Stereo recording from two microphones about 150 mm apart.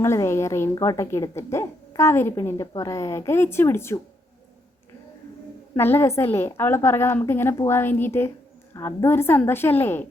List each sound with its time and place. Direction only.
0.0 s a woman's voice: 15° left (ahead or behind)
5.7 s a woman's voice: 15° left (ahead or behind)